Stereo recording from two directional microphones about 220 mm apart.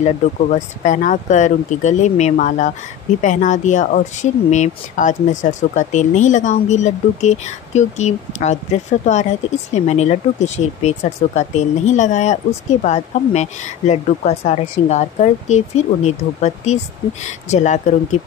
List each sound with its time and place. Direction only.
0.0 s speech: 35° left (ahead or behind)